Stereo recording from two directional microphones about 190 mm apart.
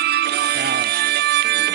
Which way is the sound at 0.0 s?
60° right (ahead or behind).